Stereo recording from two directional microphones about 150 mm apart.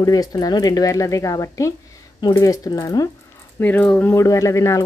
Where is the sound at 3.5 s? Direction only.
10° left (ahead or behind).